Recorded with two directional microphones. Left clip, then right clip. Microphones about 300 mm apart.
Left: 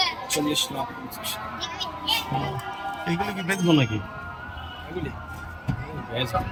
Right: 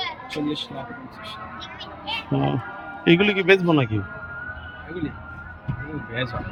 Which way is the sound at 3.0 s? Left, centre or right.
Right.